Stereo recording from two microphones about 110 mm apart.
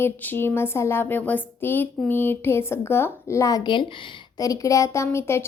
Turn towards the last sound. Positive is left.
turn(degrees=25)  # may be behind; listen again after turning